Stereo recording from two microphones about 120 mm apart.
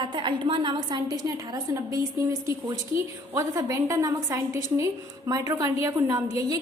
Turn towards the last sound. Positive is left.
turn(degrees=-30)  # may be behind; listen again after turning